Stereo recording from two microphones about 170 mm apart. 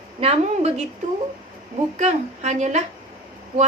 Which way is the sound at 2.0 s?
40° right (ahead or behind).